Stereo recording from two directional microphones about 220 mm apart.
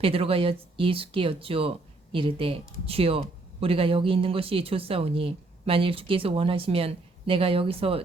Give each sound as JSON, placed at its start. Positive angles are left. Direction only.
{"t": 0.0, "sound": "speech", "side_deg": -25}